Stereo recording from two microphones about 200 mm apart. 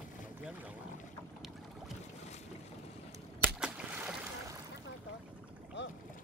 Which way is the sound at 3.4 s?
5° right (ahead or behind).